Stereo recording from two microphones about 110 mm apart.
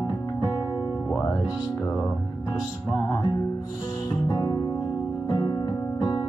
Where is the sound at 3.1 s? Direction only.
40° left (ahead or behind).